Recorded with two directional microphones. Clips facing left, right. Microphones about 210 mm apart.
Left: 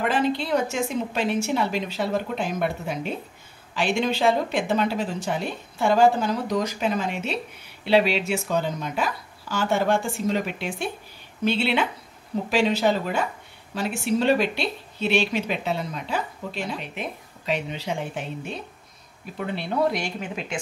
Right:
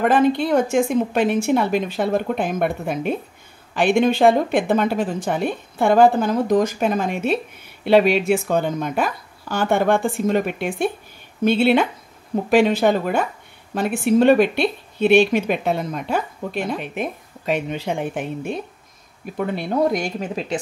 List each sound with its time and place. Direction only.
0.0 s speech: 50° right (ahead or behind)